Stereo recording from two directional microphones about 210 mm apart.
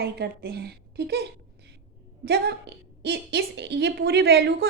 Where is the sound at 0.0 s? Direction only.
50° right (ahead or behind).